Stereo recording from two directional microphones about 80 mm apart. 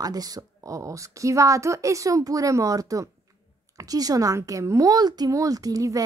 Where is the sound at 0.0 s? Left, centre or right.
Right.